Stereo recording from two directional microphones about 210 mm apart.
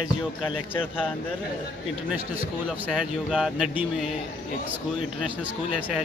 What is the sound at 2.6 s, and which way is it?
Speech, 5° right (ahead or behind).